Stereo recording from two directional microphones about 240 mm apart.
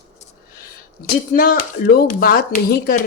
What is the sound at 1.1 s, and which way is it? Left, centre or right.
Speech, left.